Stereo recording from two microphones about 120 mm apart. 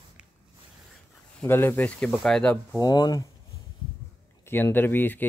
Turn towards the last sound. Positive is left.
turn(degrees=15)  # may be behind; listen again after turning